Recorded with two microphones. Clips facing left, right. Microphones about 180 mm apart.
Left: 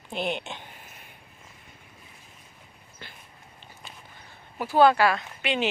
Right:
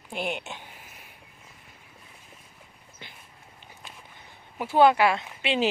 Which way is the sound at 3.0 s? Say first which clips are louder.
Left 1 dB; 20° right (ahead or behind).